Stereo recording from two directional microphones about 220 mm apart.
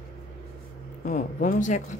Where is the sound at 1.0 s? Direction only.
35° left (ahead or behind).